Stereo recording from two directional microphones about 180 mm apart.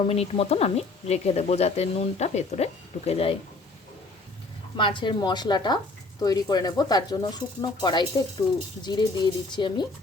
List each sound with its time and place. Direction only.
0.0 s speech: 35° left (ahead or behind)
4.8 s speech: 25° left (ahead or behind)